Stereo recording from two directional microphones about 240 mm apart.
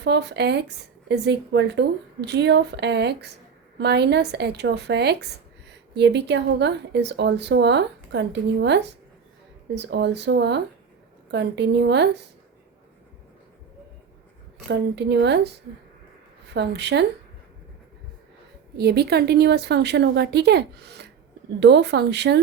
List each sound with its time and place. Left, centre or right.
0.0 s speech: right
14.7 s speech: right
16.6 s speech: right
18.8 s speech: right